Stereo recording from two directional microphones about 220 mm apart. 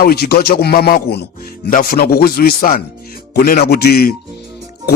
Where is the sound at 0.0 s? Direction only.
45° left (ahead or behind).